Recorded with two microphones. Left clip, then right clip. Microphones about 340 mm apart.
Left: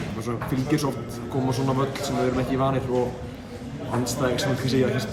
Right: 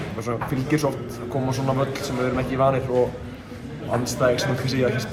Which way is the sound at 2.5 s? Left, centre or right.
Centre.